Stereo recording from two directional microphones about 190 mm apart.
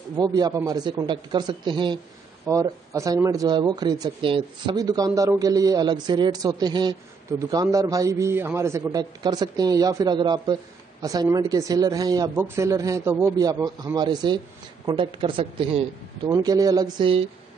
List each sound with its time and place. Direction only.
0.1 s a man's voice: 20° right (ahead or behind)